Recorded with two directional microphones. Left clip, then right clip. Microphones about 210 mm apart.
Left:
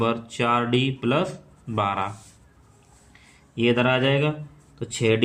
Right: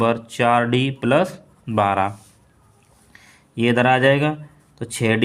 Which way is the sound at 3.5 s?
50° right (ahead or behind).